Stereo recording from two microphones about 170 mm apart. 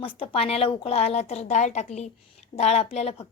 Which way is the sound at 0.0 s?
35° left (ahead or behind).